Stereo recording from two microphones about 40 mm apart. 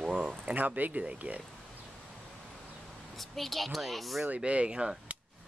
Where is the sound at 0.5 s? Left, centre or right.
Right.